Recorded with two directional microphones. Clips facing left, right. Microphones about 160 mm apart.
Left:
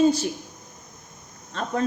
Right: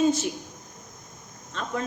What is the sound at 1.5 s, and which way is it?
Speech, 40° left (ahead or behind).